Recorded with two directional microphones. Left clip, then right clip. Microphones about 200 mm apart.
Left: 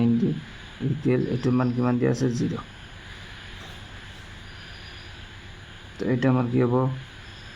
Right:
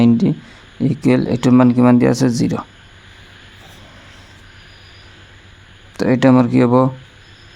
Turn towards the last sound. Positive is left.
turn(degrees=-50)  # may be behind; listen again after turning